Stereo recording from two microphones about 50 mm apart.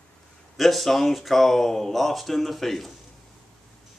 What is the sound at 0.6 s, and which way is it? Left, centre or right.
Speech, centre.